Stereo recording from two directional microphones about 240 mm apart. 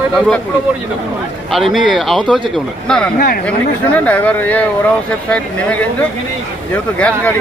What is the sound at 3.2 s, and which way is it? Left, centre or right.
Speech, left.